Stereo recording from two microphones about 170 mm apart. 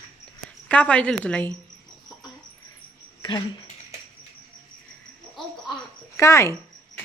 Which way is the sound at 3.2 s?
25° left (ahead or behind).